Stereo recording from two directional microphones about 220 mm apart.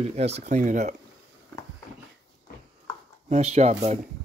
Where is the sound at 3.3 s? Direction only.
30° right (ahead or behind).